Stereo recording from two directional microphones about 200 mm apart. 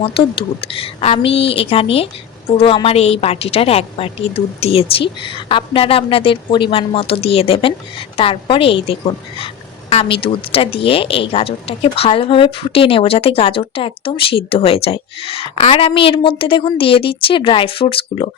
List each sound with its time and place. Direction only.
0.0 s a woman's voice: 30° left (ahead or behind)